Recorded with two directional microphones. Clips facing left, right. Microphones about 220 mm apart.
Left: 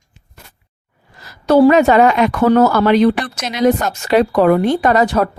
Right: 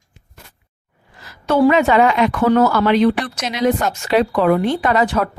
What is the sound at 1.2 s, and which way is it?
A woman's voice, 40° left (ahead or behind).